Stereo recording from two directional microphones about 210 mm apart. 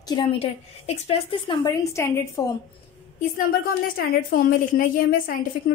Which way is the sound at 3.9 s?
45° left (ahead or behind).